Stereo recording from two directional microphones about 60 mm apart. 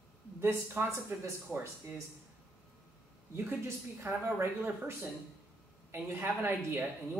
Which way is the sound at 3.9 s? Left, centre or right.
Right.